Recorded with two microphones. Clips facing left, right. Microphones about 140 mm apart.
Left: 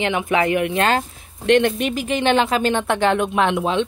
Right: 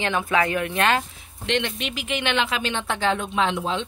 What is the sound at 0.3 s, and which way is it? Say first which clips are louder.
Speech: left 6 dB; 20° left (ahead or behind).